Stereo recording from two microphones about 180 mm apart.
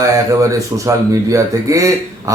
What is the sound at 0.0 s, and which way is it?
Speech, 15° right (ahead or behind).